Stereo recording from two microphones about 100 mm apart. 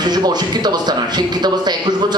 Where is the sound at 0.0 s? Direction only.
45° right (ahead or behind).